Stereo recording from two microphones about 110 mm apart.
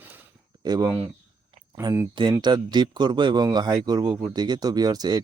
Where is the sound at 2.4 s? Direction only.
40° right (ahead or behind).